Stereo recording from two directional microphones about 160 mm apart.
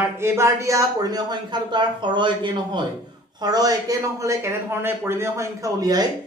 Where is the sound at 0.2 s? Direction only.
20° right (ahead or behind).